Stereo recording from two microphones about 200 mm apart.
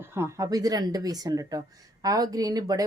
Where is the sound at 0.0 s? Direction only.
15° right (ahead or behind).